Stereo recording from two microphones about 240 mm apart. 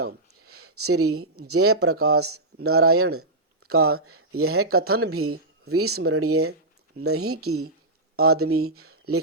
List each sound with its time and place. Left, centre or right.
0.4 s speech: right